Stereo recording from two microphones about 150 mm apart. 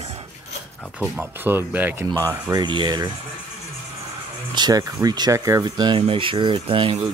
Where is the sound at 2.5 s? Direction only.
30° right (ahead or behind).